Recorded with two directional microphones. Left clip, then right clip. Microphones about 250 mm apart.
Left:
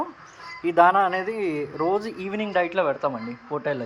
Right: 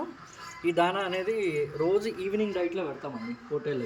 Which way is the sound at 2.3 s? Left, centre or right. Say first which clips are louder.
Left 8 dB; left.